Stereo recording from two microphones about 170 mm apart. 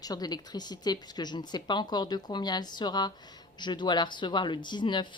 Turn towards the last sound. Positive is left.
turn(degrees=25)  # may be behind; listen again after turning